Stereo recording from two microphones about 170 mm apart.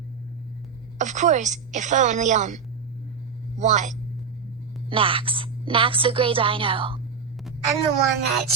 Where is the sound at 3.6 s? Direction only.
45° right (ahead or behind).